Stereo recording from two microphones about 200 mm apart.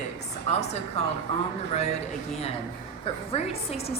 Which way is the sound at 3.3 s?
30° left (ahead or behind).